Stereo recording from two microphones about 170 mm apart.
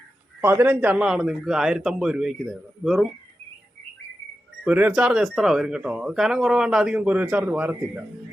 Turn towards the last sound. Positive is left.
turn(degrees=-10)  # may be behind; listen again after turning